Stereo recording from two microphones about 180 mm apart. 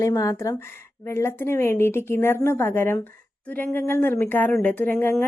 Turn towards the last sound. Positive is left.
turn(degrees=10)  # may be behind; listen again after turning